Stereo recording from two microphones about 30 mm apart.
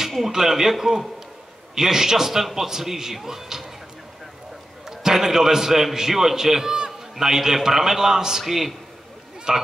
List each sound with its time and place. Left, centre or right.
0.3 s a man's voice: centre
4.8 s a man's voice: centre
9.5 s speech: right